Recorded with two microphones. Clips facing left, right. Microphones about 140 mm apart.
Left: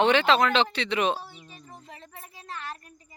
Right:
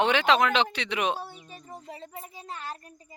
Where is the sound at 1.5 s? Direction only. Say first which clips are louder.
Right 4 dB; 40° right (ahead or behind).